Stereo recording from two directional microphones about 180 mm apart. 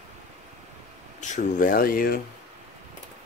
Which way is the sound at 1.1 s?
40° left (ahead or behind).